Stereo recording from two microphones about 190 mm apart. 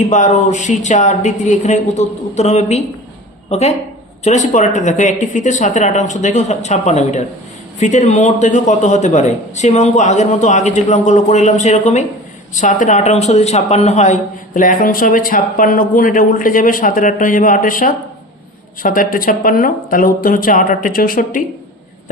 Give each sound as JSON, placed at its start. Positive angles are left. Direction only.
{"t": 0.0, "sound": "a man's voice", "side_deg": 40}